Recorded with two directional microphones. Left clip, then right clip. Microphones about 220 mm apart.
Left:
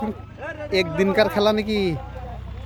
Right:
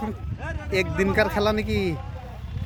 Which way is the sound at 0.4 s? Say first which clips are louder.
Left 3 dB; 50° right (ahead or behind).